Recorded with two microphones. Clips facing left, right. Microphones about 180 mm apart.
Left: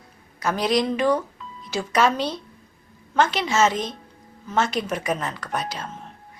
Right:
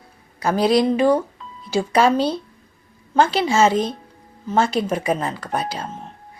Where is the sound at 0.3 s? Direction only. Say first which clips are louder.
Right 5 dB; 30° right (ahead or behind).